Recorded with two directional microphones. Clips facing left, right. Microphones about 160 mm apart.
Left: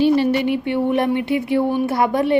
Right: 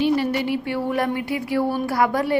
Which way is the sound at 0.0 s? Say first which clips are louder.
Left 5 dB; 25° left (ahead or behind).